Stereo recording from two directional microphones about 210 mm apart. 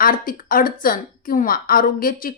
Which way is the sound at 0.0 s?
40° left (ahead or behind).